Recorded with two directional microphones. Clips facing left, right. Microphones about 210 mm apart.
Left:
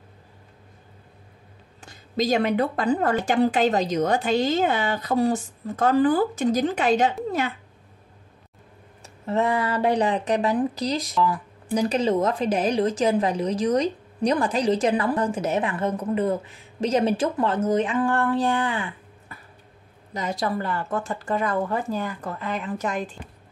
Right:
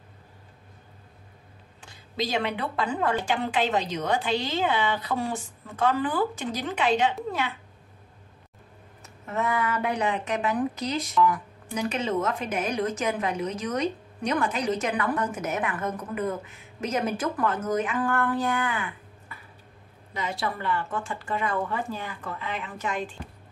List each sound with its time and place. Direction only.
1.8 s a woman's voice: 40° left (ahead or behind)
9.0 s speech: 30° left (ahead or behind)